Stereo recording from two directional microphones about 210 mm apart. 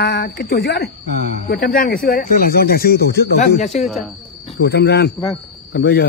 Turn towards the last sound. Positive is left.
turn(degrees=45)  # may be behind; listen again after turning